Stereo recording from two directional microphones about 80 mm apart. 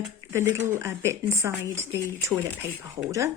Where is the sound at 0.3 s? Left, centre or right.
Right.